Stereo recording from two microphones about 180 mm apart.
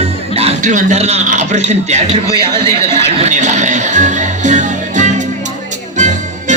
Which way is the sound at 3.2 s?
40° right (ahead or behind).